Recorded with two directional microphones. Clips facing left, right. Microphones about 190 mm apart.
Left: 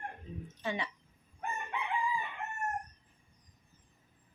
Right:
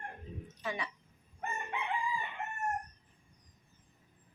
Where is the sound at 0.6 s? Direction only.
25° left (ahead or behind).